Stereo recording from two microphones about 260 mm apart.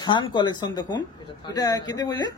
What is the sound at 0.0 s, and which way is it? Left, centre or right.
Speech, centre.